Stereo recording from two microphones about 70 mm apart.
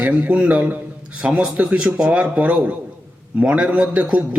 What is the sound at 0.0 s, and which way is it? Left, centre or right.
A man's voice, centre.